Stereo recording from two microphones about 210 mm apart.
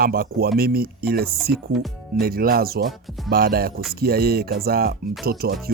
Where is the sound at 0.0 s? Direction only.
45° right (ahead or behind).